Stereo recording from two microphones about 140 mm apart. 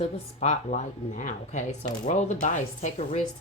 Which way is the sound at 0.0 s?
55° left (ahead or behind).